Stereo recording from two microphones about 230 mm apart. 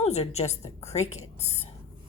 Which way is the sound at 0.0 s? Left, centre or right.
Left.